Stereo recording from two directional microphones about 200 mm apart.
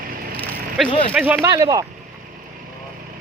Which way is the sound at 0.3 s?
10° left (ahead or behind).